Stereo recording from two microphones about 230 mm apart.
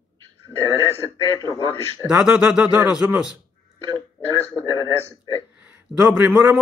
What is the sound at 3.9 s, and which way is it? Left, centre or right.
Speech, centre.